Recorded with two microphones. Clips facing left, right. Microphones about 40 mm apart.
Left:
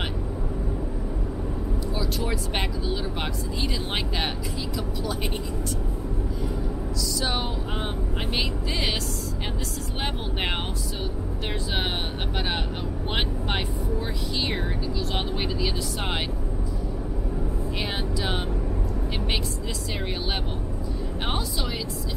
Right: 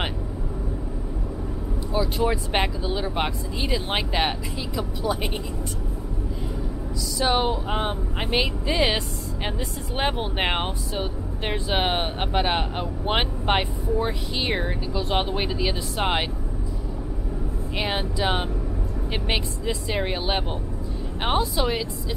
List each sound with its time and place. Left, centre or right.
2.0 s speech: centre
7.2 s speech: centre
17.7 s speech: centre
19.9 s speech: centre